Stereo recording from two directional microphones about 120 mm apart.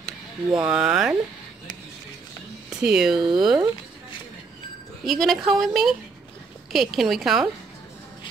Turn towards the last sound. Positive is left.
turn(degrees=0)  # may be behind; listen again after turning